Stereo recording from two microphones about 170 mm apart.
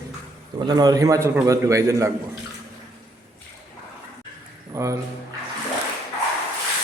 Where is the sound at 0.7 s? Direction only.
25° right (ahead or behind).